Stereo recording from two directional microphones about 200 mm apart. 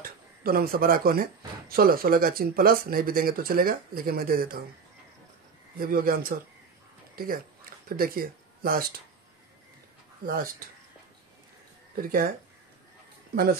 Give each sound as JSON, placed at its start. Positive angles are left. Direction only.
{"t": 0.0, "sound": "speech", "side_deg": -45}
{"t": 5.8, "sound": "speech", "side_deg": -45}
{"t": 7.9, "sound": "speech", "side_deg": -45}
{"t": 10.2, "sound": "speech", "side_deg": -45}
{"t": 12.0, "sound": "speech", "side_deg": -45}
{"t": 13.3, "sound": "speech", "side_deg": -50}